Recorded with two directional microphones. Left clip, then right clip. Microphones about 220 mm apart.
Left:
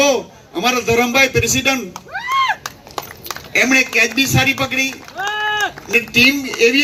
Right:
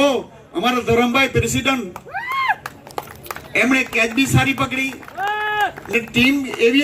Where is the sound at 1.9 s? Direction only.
40° left (ahead or behind).